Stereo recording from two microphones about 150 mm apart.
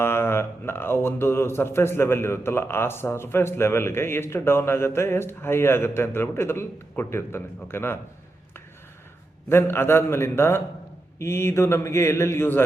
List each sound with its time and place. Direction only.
0.0 s speech: 15° left (ahead or behind)
9.5 s speech: 15° left (ahead or behind)